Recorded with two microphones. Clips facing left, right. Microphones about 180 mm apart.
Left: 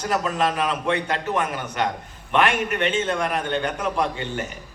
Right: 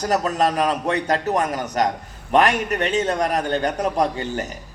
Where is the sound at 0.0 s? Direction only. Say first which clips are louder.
Right 3 dB; 40° right (ahead or behind).